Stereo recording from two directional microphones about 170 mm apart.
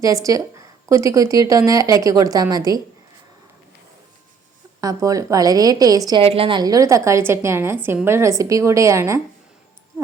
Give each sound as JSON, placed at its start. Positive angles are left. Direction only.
{"t": 0.0, "sound": "a woman's voice", "side_deg": -20}
{"t": 4.8, "sound": "a woman's voice", "side_deg": -20}
{"t": 6.2, "sound": "a woman's voice", "side_deg": -35}